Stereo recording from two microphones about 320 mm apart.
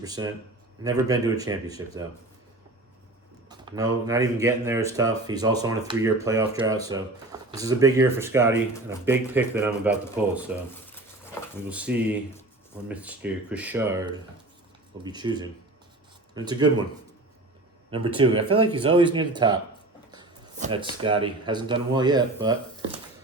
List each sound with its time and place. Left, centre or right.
0.0 s speech: centre
3.5 s speech: centre
11.7 s speech: centre
17.9 s speech: centre
20.1 s a sound: centre
21.0 s speech: centre